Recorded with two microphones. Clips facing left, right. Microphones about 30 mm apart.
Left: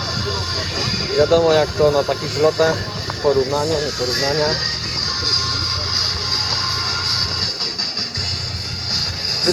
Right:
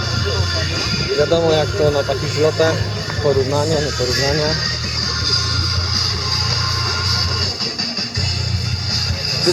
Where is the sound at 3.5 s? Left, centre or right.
Centre.